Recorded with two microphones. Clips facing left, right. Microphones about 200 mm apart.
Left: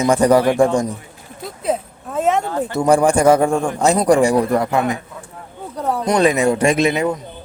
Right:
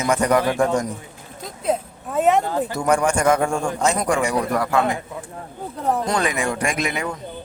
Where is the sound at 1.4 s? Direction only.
Centre (ahead or behind).